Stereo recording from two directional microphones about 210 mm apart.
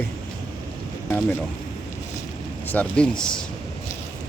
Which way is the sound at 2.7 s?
5° left (ahead or behind).